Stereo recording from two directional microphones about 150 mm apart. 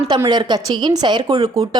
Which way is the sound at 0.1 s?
30° right (ahead or behind).